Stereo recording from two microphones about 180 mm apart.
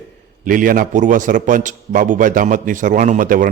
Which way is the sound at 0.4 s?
50° right (ahead or behind).